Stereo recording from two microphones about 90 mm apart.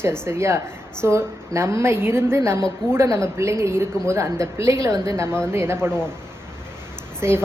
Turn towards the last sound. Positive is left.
turn(degrees=-30)  # may be behind; listen again after turning